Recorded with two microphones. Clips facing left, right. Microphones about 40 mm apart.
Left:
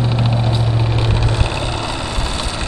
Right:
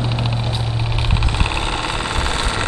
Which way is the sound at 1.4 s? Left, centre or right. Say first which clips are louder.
Even; right.